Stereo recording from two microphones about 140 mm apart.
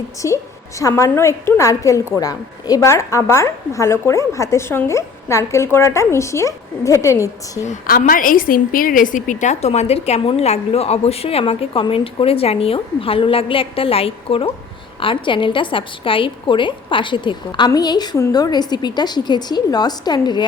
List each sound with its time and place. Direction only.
0.2 s a woman's voice: 20° left (ahead or behind)
7.6 s a woman's voice: 75° left (ahead or behind); by 20.4 s 30° left (ahead or behind)